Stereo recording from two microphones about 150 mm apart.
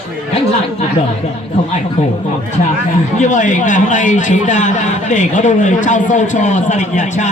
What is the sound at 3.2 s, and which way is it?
A man's voice, 55° left (ahead or behind).